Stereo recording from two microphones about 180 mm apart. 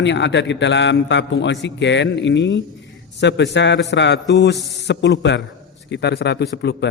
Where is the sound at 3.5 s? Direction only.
75° left (ahead or behind).